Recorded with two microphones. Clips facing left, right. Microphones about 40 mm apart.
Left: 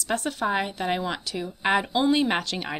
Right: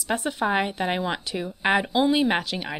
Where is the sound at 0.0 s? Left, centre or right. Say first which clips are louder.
Right 1 dB; centre.